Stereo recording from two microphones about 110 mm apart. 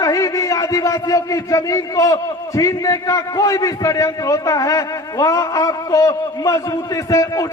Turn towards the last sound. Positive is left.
turn(degrees=30)  # may be behind; listen again after turning